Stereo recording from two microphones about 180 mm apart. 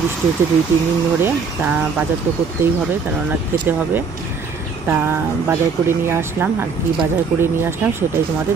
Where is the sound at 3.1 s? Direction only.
10° right (ahead or behind).